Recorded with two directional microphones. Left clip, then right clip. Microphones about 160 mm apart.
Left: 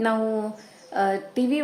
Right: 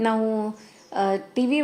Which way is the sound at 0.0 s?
15° right (ahead or behind).